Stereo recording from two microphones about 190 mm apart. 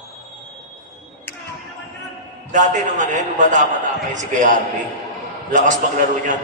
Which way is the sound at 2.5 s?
40° right (ahead or behind).